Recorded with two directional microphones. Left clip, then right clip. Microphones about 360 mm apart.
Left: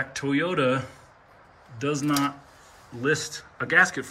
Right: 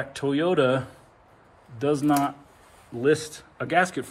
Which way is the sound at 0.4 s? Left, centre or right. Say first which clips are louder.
Right 2 dB; centre.